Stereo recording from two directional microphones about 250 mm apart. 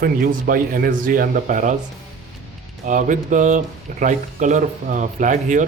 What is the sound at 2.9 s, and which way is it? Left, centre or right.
Speech, right.